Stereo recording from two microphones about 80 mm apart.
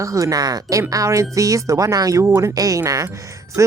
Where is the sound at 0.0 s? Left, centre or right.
Right.